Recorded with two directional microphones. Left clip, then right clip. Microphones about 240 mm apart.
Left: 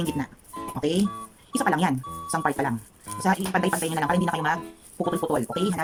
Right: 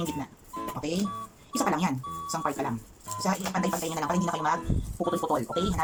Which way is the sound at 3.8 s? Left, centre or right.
Left.